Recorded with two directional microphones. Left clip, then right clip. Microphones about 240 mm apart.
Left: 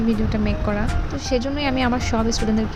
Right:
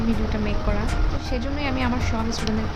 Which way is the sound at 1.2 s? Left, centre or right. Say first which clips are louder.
Left 7 dB; left.